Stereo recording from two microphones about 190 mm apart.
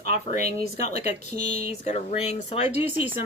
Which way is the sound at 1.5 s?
35° left (ahead or behind).